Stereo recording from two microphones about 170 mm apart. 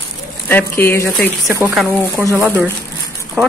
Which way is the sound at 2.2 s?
15° right (ahead or behind).